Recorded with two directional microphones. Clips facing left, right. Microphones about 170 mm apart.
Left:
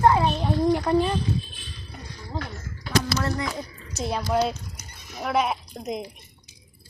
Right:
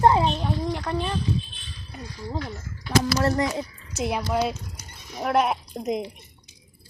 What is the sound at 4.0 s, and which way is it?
Speech, 15° right (ahead or behind).